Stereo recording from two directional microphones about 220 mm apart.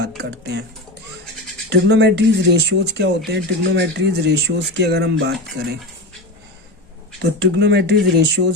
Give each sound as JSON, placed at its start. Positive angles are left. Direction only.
{"t": 0.2, "sound": "speech", "side_deg": -50}
{"t": 1.7, "sound": "speech", "side_deg": -50}
{"t": 7.2, "sound": "speech", "side_deg": -50}